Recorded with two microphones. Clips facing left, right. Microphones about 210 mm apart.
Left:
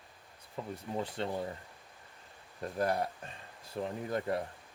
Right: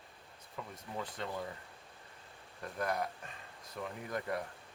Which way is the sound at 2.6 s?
30° left (ahead or behind).